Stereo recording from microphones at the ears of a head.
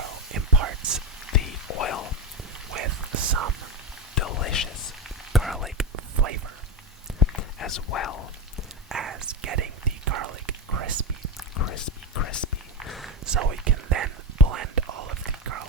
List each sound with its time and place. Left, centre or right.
0.0 s whispering: right
1.3 s a sound: left
2.6 s whispering: right
4.1 s whispering: left
5.3 s whispering: centre
5.9 s whispering: right
7.3 s a sound: left
8.9 s whispering: right
11.5 s whispering: left
13.2 s whispering: right